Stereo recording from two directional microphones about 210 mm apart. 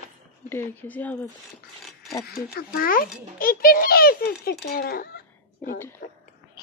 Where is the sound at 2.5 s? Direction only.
45° left (ahead or behind).